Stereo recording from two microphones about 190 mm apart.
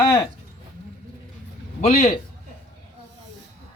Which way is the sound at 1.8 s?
40° left (ahead or behind).